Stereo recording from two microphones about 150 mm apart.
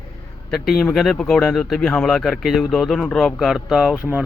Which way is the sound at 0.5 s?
Centre (ahead or behind).